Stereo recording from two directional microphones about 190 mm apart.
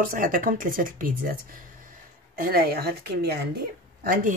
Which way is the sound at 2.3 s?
50° right (ahead or behind).